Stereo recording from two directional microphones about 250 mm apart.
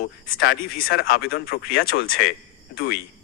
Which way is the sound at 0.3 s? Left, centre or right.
Left.